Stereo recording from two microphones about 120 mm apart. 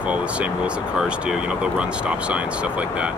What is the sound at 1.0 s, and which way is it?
Speech, 5° right (ahead or behind).